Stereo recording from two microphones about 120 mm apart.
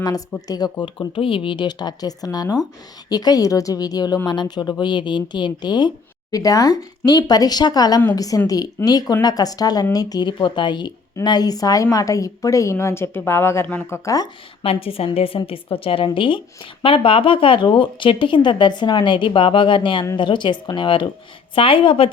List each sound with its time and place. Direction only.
0.0 s a woman's voice: 30° left (ahead or behind)
14.6 s speech: 50° left (ahead or behind)